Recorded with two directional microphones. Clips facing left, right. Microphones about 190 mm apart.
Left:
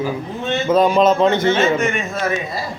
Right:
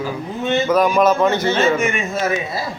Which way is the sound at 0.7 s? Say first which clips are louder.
Left 3 dB; 25° left (ahead or behind).